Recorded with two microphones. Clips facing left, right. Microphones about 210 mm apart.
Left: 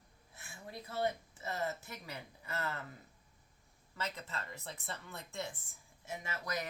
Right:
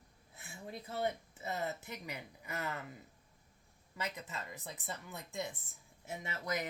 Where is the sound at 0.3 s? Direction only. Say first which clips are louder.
Right 2 dB; 20° right (ahead or behind).